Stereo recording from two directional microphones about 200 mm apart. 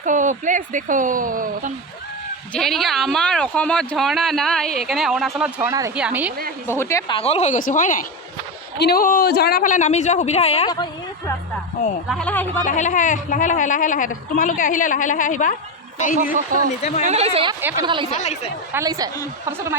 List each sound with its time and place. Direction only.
0.0 s speech: 40° right (ahead or behind)
2.5 s speech: centre (ahead or behind)
5.6 s a woman's voice: 15° right (ahead or behind)
6.7 s speech: 15° left (ahead or behind)
7.2 s a woman's voice: 30° left (ahead or behind)
12.0 s speech: 5° left (ahead or behind)
12.6 s a woman's voice: 40° left (ahead or behind)
17.0 s speech: 30° right (ahead or behind)
17.6 s a woman's voice: 10° right (ahead or behind)
17.8 s a woman's voice: 25° right (ahead or behind)
18.2 s a woman's voice: 35° left (ahead or behind)
18.7 s a woman's voice: 15° right (ahead or behind)